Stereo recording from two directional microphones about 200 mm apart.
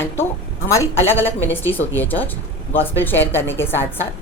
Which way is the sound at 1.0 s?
10° left (ahead or behind).